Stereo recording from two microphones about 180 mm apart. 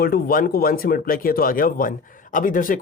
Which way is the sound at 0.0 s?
55° left (ahead or behind).